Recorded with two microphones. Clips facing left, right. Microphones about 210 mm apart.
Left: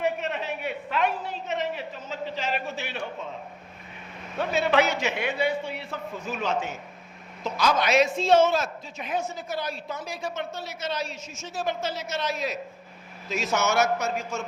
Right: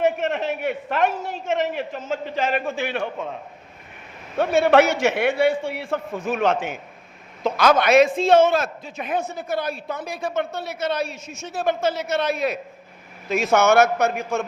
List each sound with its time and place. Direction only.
0.0 s a sound: 50° right (ahead or behind)
1.6 s a man's voice: 85° right
2.0 s a man's voice: 55° right (ahead or behind)
4.6 s a man's voice: 50° right (ahead or behind)
5.3 s a man's voice: 85° right
6.3 s a man's voice: 60° right (ahead or behind)